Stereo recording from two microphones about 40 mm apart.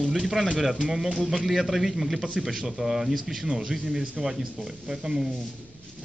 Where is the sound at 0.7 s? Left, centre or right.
Centre.